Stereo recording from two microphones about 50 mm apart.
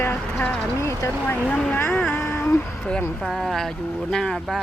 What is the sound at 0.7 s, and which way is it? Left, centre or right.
Speech, left.